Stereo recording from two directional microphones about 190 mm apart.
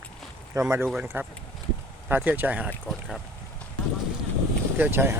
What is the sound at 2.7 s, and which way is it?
Speech, 5° left (ahead or behind).